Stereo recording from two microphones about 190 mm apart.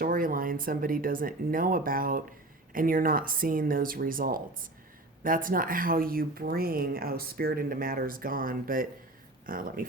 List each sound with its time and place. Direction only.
0.0 s speech: 45° right (ahead or behind)